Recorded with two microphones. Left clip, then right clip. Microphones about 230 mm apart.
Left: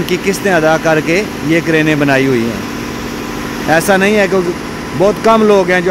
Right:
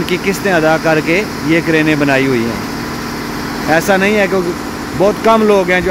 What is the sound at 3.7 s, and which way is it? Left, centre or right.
Speech, centre.